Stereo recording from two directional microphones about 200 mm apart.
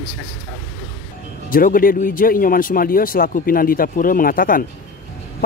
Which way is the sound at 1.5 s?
45° left (ahead or behind).